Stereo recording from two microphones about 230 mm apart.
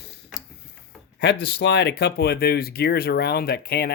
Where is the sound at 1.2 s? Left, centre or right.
Left.